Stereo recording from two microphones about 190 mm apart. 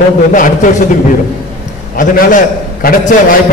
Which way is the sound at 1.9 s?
45° left (ahead or behind).